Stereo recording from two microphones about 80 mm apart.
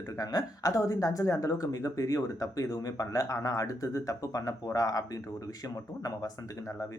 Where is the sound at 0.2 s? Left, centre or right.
Left.